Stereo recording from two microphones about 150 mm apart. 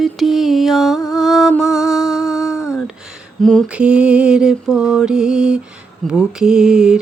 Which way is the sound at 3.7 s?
5° right (ahead or behind).